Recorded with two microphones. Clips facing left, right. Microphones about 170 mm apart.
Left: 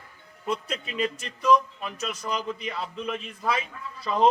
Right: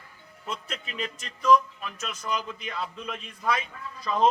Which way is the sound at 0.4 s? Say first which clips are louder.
Left 6 dB; 10° left (ahead or behind).